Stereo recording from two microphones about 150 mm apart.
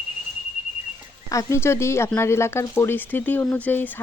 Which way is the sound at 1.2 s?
20° left (ahead or behind).